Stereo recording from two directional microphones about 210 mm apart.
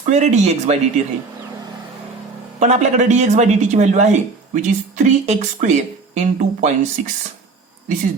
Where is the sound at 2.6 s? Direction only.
35° right (ahead or behind).